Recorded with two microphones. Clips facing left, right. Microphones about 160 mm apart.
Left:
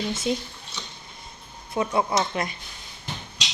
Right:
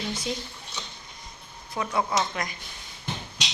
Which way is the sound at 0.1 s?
25° left (ahead or behind).